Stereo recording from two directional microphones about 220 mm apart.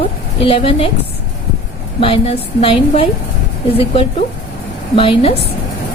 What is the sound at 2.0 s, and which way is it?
Speech, 25° left (ahead or behind).